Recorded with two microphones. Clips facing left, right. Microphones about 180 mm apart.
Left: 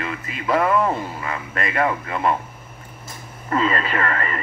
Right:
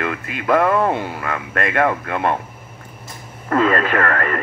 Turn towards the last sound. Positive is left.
turn(degrees=-55)  # may be behind; listen again after turning